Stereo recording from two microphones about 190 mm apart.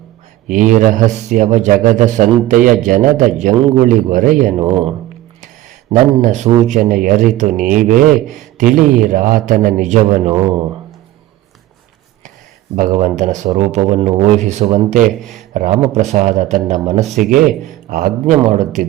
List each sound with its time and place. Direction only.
0.4 s a man's voice: 40° right (ahead or behind)
4.6 s speech: 30° right (ahead or behind)
5.9 s a man's voice: 40° right (ahead or behind)
12.7 s a man's voice: 40° right (ahead or behind)
15.2 s speech: centre (ahead or behind)
15.5 s a man's voice: 40° right (ahead or behind)
17.5 s speech: centre (ahead or behind)
17.9 s a man's voice: 50° right (ahead or behind)